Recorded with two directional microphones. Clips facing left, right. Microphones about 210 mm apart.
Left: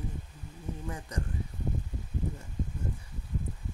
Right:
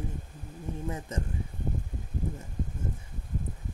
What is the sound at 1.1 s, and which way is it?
Speech, 25° right (ahead or behind).